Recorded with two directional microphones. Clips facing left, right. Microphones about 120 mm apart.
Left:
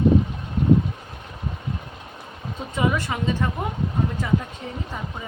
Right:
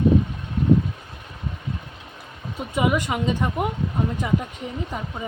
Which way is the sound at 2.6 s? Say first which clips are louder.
Right 2 dB; 15° right (ahead or behind).